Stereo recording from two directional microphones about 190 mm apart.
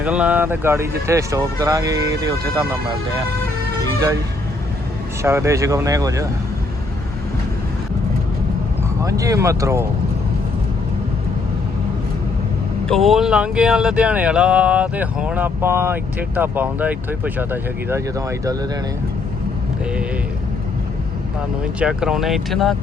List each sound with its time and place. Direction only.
0.0 s speech: 5° right (ahead or behind)
3.8 s vehicle: 20° right (ahead or behind)
5.2 s speech: 15° right (ahead or behind)
9.0 s speech: 15° right (ahead or behind)
12.9 s speech: centre (ahead or behind)
21.6 s speech: 5° right (ahead or behind)